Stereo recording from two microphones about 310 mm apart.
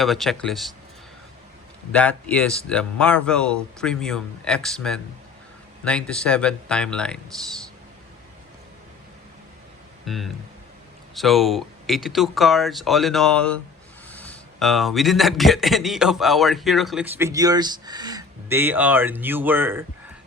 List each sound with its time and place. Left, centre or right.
0.0 s speech: centre
1.9 s speech: centre
10.1 s speech: centre